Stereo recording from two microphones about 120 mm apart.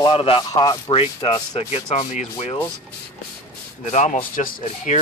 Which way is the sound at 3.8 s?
85° left.